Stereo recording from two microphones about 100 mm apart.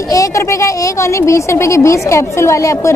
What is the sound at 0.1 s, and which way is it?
Speech, 35° left (ahead or behind).